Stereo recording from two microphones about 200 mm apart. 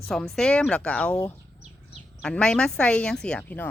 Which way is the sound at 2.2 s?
5° left (ahead or behind).